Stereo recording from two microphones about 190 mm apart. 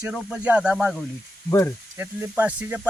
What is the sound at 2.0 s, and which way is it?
Speech, 10° right (ahead or behind).